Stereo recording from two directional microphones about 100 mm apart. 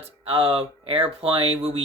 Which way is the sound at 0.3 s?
65° right (ahead or behind).